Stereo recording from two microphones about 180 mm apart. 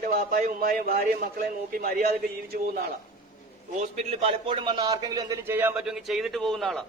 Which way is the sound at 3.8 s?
40° right (ahead or behind).